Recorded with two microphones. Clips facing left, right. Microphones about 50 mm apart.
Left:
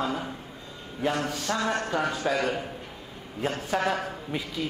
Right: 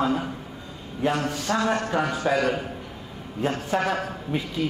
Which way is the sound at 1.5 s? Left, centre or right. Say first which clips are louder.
Right 4 dB; centre.